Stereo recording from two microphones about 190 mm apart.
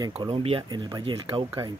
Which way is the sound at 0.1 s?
30° right (ahead or behind).